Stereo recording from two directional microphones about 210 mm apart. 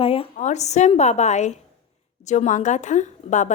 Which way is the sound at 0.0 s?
25° left (ahead or behind).